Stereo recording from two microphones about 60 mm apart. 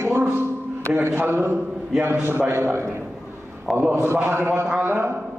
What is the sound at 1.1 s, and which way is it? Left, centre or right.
A man's voice, right.